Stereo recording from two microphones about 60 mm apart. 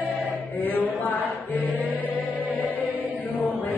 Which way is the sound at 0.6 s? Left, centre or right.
Left.